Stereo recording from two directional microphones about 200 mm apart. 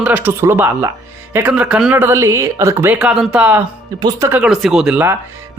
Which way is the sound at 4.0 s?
15° right (ahead or behind).